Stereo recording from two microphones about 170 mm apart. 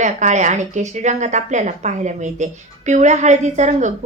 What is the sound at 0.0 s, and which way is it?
Speech, 45° right (ahead or behind).